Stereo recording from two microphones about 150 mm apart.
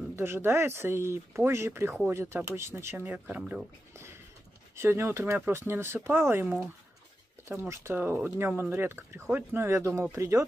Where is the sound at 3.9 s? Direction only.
15° right (ahead or behind).